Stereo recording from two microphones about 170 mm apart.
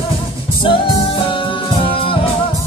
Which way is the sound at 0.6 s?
30° left (ahead or behind).